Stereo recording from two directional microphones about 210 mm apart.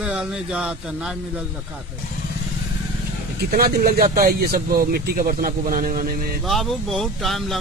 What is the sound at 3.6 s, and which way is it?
A man's voice, 45° right (ahead or behind).